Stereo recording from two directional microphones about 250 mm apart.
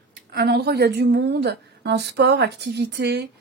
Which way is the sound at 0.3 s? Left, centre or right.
Right.